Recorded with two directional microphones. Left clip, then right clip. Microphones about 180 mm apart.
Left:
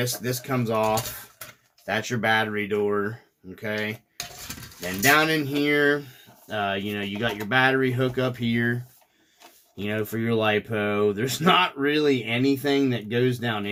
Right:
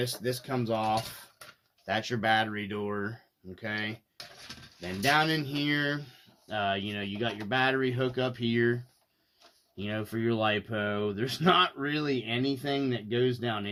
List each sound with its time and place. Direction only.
0.0 s speech: 40° right (ahead or behind)
5.0 s speech: 35° right (ahead or behind)